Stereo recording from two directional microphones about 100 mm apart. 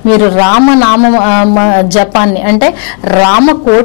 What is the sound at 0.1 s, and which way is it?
A man's voice, 15° left (ahead or behind).